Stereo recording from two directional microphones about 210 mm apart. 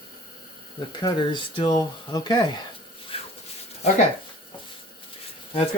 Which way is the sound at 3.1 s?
25° left (ahead or behind).